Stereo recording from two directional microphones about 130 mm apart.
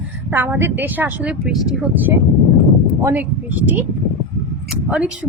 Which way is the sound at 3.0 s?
20° right (ahead or behind).